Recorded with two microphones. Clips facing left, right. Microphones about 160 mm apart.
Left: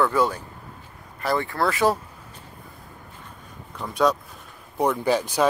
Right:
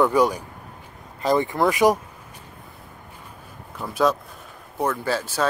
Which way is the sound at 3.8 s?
Centre (ahead or behind).